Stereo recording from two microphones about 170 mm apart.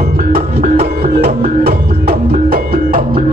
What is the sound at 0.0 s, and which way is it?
Music, 55° right (ahead or behind).